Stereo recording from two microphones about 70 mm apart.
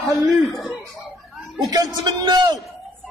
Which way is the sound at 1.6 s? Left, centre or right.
Right.